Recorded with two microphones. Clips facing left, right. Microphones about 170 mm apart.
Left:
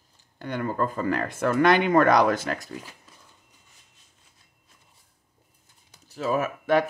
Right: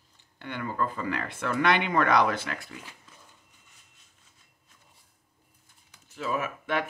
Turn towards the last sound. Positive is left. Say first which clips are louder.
# left 7 dB
turn(degrees=40)  # may be behind; listen again after turning